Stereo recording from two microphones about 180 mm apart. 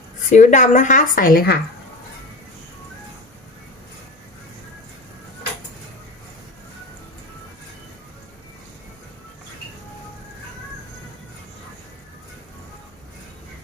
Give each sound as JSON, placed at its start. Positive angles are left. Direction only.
{"t": 0.3, "sound": "speech", "side_deg": 40}